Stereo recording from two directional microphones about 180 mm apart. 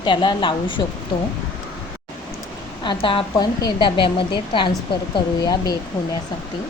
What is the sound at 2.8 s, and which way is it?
A woman's voice, 30° left (ahead or behind).